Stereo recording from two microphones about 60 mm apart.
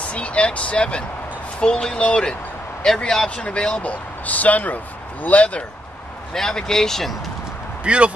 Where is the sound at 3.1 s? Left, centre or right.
Centre.